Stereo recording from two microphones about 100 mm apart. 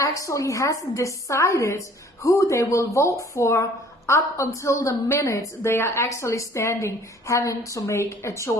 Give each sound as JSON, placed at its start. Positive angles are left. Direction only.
{"t": 0.0, "sound": "speech", "side_deg": 30}